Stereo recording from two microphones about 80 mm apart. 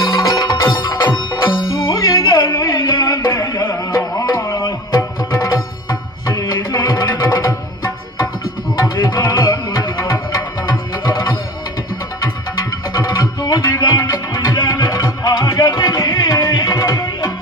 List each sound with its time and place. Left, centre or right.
0.0 s music: left
2.3 s music: left
3.3 s music: left
9.0 s music: left
13.4 s music: left